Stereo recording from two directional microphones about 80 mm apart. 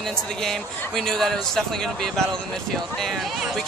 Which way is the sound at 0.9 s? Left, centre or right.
Centre.